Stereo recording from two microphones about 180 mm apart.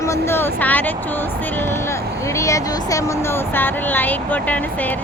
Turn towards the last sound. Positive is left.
turn(degrees=10)  # may be behind; listen again after turning